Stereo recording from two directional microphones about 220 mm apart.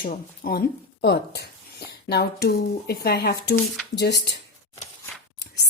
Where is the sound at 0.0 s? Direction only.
40° left (ahead or behind).